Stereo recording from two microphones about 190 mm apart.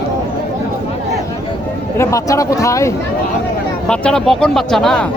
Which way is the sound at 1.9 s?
15° left (ahead or behind).